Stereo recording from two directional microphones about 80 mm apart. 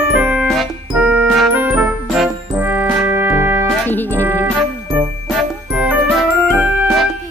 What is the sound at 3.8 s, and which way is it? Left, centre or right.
Music, left.